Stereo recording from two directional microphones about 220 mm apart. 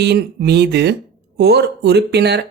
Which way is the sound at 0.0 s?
50° right (ahead or behind).